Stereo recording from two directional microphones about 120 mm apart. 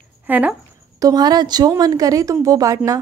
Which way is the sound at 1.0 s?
30° right (ahead or behind).